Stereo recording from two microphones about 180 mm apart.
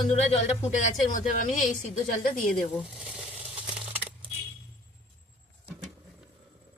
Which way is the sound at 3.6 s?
30° right (ahead or behind).